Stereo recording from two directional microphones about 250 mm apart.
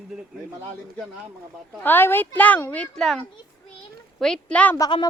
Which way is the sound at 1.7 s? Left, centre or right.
Centre.